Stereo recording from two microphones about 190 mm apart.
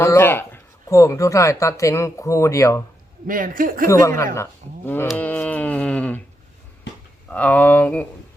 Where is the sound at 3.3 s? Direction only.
45° right (ahead or behind).